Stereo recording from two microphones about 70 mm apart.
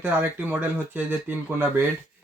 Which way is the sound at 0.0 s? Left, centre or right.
Right.